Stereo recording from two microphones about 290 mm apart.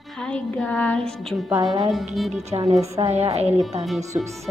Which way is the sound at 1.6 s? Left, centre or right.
Centre.